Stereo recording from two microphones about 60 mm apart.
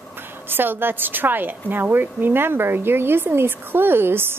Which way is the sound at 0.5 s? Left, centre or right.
Right.